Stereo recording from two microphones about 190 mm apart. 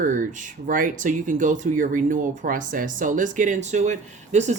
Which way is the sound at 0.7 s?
45° right (ahead or behind).